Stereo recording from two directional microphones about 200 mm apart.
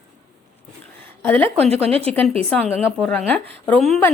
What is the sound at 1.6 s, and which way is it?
Speech, 30° right (ahead or behind).